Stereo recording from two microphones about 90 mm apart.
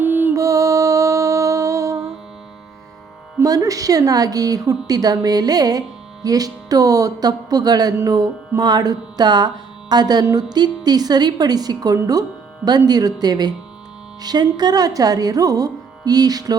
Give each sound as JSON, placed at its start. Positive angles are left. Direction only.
{"t": 0.0, "sound": "music", "side_deg": -25}
{"t": 0.3, "sound": "music", "side_deg": -35}
{"t": 3.4, "sound": "speech", "side_deg": -40}
{"t": 6.2, "sound": "music", "side_deg": -45}